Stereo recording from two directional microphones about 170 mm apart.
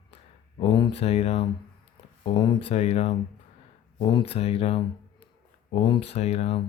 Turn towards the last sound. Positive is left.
turn(degrees=35)  # may be behind; listen again after turning